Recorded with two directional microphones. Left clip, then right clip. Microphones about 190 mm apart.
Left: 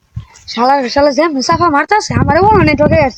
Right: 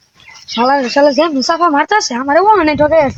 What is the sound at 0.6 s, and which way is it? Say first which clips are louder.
Speech: even; 30° left (ahead or behind).